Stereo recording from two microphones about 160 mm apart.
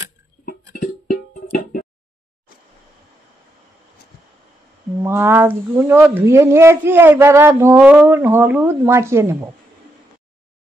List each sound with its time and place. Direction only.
1.5 s music: 60° left (ahead or behind)
5.0 s speech: 15° right (ahead or behind)